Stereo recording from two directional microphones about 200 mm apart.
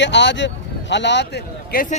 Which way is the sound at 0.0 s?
60° left (ahead or behind).